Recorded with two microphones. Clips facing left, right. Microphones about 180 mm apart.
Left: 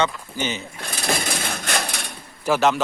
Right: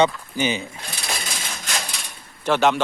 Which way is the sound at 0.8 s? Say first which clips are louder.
Left 6 dB; 55° left (ahead or behind).